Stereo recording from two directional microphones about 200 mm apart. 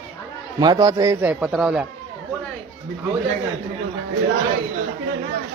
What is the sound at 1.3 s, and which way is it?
Speech, 5° right (ahead or behind).